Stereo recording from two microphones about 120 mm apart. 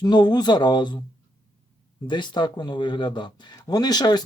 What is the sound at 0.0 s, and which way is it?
Speech, 35° left (ahead or behind).